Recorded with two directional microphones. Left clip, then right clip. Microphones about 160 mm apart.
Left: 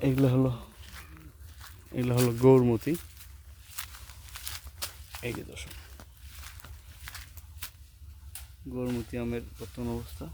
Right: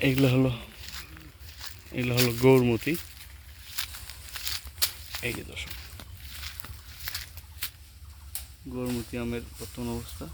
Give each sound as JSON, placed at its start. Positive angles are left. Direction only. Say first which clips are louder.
{"t": 0.3, "sound": "speech", "louder": "right 2 dB", "side_deg": 0}
{"t": 1.9, "sound": "speech", "louder": "right 1 dB", "side_deg": 15}
{"t": 2.1, "sound": "speech", "louder": "even", "side_deg": 0}
{"t": 3.8, "sound": "a sound", "louder": "right 7 dB", "side_deg": 0}
{"t": 4.4, "sound": "walk", "louder": "right 9 dB", "side_deg": -10}
{"t": 5.4, "sound": "speech", "louder": "right 4 dB", "side_deg": 10}
{"t": 6.6, "sound": "a sound", "louder": "right 7 dB", "side_deg": -15}
{"t": 7.6, "sound": "a sound", "louder": "right 7 dB", "side_deg": 5}
{"t": 8.7, "sound": "speech", "louder": "right 1 dB", "side_deg": 5}